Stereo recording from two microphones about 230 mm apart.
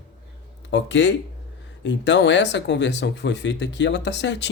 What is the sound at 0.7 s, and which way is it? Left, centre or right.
Speech, left.